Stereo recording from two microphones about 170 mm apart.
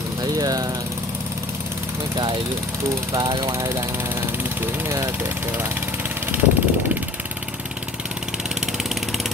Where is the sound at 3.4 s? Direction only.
15° right (ahead or behind).